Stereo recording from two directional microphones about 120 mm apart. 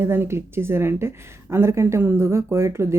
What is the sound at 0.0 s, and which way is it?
A woman's voice, 20° right (ahead or behind).